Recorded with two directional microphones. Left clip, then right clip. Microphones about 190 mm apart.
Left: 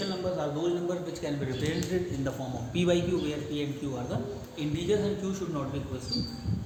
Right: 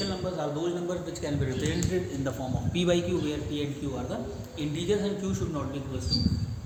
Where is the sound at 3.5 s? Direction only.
5° right (ahead or behind).